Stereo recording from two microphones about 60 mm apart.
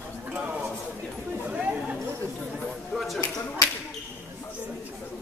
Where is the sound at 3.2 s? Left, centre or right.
Left.